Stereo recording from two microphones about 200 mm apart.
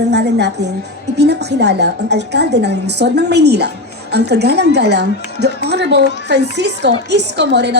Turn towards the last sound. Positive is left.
turn(degrees=-60)  # may be behind; listen again after turning